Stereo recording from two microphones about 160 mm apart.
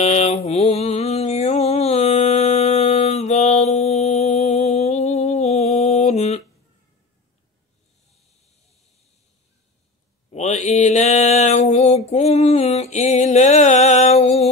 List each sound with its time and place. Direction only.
0.0 s mantra: 45° left (ahead or behind)
4.5 s music: 45° left (ahead or behind)
10.3 s mantra: 45° left (ahead or behind)